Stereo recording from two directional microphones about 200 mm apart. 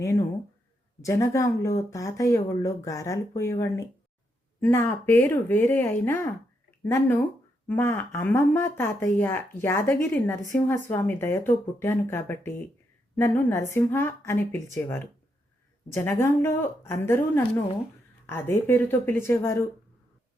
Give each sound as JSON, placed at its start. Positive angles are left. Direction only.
{"t": 1.0, "sound": "speech", "side_deg": 15}